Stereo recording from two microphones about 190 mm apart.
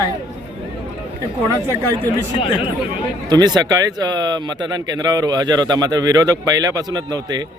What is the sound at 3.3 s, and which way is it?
Speech, 20° right (ahead or behind).